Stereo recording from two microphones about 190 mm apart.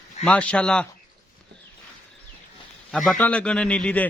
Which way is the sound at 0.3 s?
5° left (ahead or behind).